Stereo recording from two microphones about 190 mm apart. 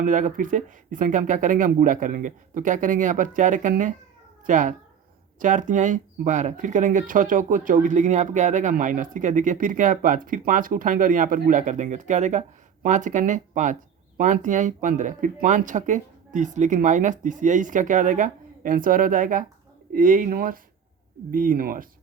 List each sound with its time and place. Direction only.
0.0 s speech: 45° right (ahead or behind)